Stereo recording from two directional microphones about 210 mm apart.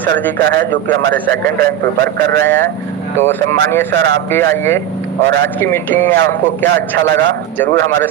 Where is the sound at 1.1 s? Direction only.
10° left (ahead or behind).